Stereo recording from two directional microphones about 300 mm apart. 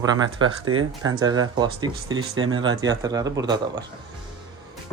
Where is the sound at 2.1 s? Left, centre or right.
Right.